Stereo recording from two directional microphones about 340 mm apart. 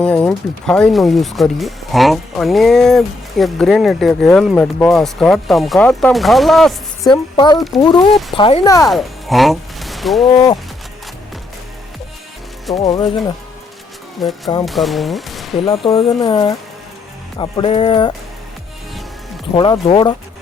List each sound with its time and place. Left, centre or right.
0.0 s speech: centre
7.1 s speech: centre
10.3 s speech: centre
12.6 s speech: centre
14.2 s speech: centre
15.5 s speech: centre
19.5 s speech: centre